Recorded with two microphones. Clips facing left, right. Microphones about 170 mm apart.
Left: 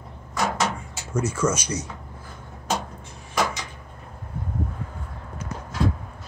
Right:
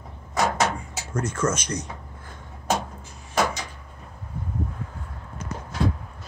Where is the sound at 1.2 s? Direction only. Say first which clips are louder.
Left 1 dB; 5° left (ahead or behind).